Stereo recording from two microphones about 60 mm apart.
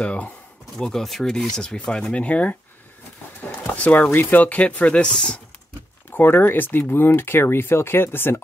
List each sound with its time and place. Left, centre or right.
0.0 s speech: left
0.7 s speech: centre
2.2 s speech: left
3.7 s speech: left
6.1 s speech: left